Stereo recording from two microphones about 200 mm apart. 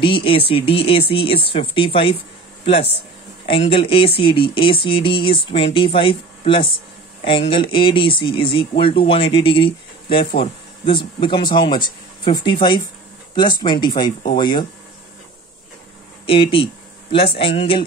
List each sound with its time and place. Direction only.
0.0 s speech: 25° left (ahead or behind)
16.3 s speech: 25° left (ahead or behind)